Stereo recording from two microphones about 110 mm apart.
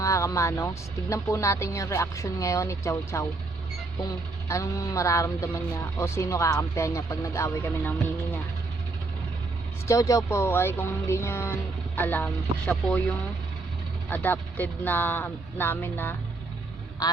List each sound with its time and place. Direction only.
0.0 s speech: 30° left (ahead or behind)
4.4 s speech: 30° left (ahead or behind)
9.8 s speech: 30° left (ahead or behind); by 12.7 s 15° left (ahead or behind)
14.1 s speech: 15° left (ahead or behind)
17.0 s a man's voice: 35° left (ahead or behind)